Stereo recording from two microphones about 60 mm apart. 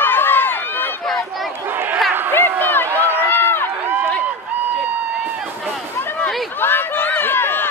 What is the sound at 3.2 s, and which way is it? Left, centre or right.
Run, left.